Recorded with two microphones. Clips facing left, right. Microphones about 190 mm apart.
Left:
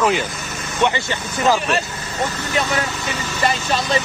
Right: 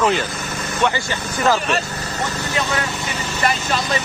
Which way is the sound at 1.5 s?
Centre (ahead or behind).